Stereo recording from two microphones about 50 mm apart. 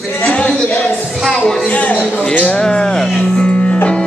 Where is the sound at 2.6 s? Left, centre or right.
Centre.